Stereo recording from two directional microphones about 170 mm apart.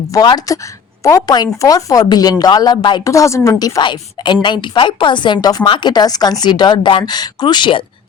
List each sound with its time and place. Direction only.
0.1 s a woman's voice: 25° left (ahead or behind)